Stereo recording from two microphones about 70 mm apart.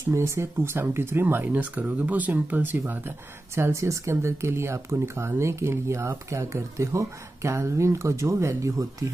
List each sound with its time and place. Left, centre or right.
0.1 s speech: right
3.5 s speech: right